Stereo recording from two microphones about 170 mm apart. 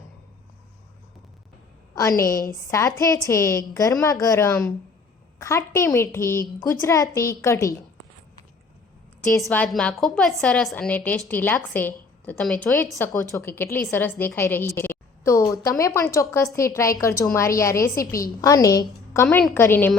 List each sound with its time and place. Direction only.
2.0 s a woman's voice: 20° left (ahead or behind)
9.6 s a woman's voice: centre (ahead or behind)
14.8 s a sound: 15° left (ahead or behind)
15.8 s a woman's voice: 15° left (ahead or behind)